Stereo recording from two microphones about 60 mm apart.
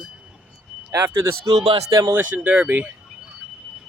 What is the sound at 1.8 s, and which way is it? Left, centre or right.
Speech, right.